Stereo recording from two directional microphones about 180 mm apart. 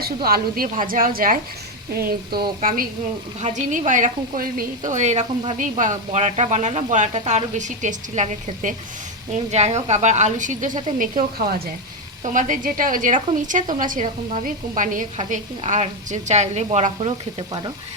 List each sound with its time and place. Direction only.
0.0 s a woman's voice: 55° right (ahead or behind); by 17.2 s 35° right (ahead or behind)